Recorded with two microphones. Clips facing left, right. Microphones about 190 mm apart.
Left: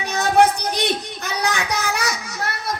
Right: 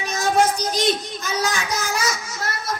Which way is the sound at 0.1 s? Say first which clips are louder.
Left 3 dB; 60° left (ahead or behind).